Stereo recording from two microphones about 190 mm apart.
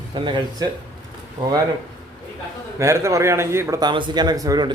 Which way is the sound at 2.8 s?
15° right (ahead or behind).